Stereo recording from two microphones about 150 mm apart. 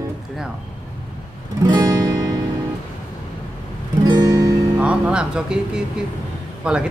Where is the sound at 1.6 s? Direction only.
25° right (ahead or behind).